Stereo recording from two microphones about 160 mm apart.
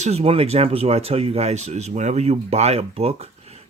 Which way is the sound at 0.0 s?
40° right (ahead or behind).